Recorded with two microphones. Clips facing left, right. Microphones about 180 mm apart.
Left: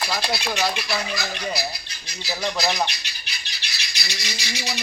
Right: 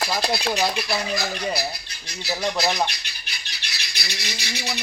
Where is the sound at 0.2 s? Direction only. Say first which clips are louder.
Right 3 dB; 35° right (ahead or behind).